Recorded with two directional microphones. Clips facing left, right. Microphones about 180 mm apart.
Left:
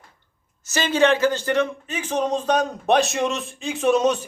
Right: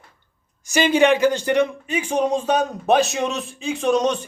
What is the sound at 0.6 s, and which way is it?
Speech, 15° right (ahead or behind).